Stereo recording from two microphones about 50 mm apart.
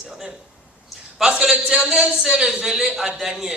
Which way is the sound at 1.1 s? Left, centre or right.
Centre.